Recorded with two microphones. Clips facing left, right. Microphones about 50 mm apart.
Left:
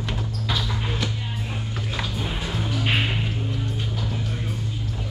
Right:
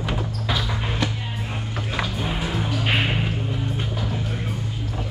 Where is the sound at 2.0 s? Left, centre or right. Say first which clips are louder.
Right 4 dB; centre.